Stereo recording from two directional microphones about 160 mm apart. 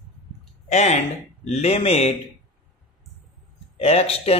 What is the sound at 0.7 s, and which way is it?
Speech, 45° left (ahead or behind).